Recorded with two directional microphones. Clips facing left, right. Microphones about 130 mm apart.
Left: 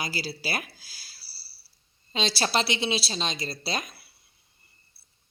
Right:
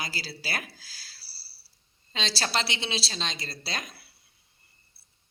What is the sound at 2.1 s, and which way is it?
A woman's voice, 15° left (ahead or behind).